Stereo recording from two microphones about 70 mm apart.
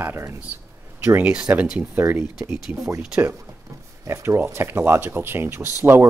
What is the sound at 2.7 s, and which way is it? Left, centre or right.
Speech, right.